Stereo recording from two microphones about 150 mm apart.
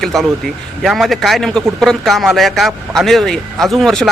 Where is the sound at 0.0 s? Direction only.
Centre (ahead or behind).